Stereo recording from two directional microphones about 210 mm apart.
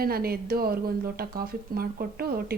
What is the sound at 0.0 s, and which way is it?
Speech, 45° right (ahead or behind).